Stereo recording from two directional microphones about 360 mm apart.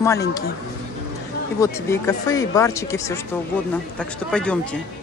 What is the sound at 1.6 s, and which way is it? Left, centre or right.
A man's voice, centre.